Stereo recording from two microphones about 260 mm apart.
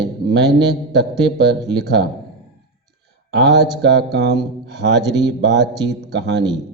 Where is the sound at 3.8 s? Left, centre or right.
Right.